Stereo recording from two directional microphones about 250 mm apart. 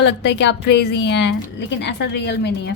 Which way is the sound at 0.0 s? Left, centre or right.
Left.